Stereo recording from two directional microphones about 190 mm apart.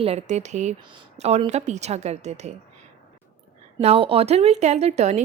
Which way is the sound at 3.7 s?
30° right (ahead or behind).